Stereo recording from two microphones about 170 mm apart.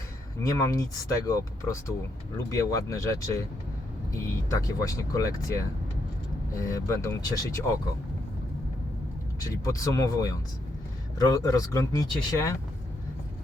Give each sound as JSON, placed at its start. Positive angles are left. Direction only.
{"t": 0.6, "sound": "speech", "side_deg": 20}
{"t": 9.4, "sound": "speech", "side_deg": 20}